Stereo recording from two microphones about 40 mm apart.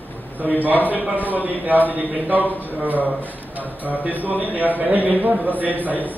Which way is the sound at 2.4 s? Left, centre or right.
Left.